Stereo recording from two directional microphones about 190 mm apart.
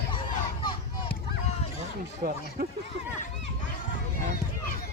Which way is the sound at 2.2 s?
50° right (ahead or behind).